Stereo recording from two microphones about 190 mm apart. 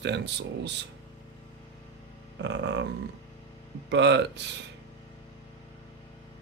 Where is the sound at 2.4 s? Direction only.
65° right (ahead or behind).